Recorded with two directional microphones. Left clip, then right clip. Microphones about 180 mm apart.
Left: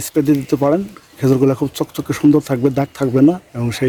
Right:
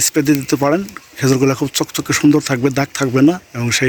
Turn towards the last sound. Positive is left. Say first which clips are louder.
# right 4 dB
turn(degrees=10)  # may be behind; listen again after turning